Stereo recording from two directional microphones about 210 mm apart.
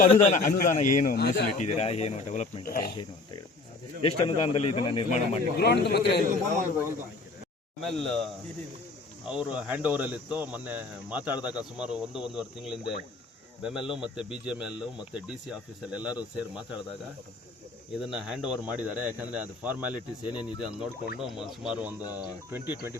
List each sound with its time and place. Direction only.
0.0 s a man's voice: 35° left (ahead or behind)
1.5 s a man's voice: 30° left (ahead or behind)
4.0 s speech: 25° left (ahead or behind)
5.5 s a man's voice: 50° left (ahead or behind)
6.2 s a man's voice: 40° right (ahead or behind)
7.8 s a man's voice: centre (ahead or behind)
18.0 s a man's voice: 5° right (ahead or behind)